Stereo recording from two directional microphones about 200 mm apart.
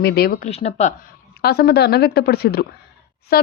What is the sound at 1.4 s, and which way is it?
Speech, 50° left (ahead or behind).